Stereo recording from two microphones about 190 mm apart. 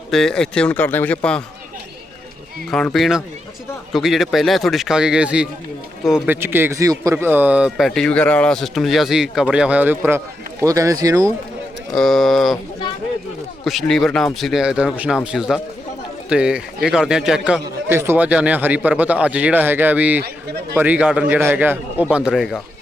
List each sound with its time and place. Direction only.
0.1 s speech: 5° left (ahead or behind)
2.6 s a man's voice: 5° left (ahead or behind); by 11.3 s 20° right (ahead or behind)
11.9 s speech: centre (ahead or behind)
13.7 s a man's voice: centre (ahead or behind)
20.2 s a sound: 60° right (ahead or behind)
20.7 s a man's voice: 10° right (ahead or behind)